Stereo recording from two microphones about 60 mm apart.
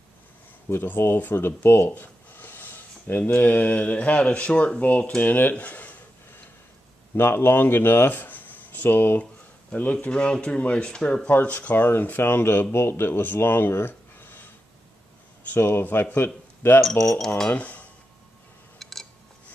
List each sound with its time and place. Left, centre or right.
0.7 s speech: left
7.2 s speech: left
9.2 s a sound: left
10.0 s speech: centre
11.7 s speech: left
15.5 s speech: left
17.0 s speech: centre
17.5 s speech: left
18.8 s a sound: centre